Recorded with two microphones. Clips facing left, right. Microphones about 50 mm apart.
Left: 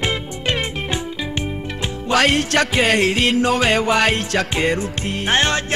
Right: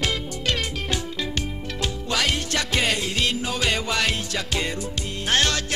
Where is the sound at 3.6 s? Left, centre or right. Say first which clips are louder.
Left 7 dB; left.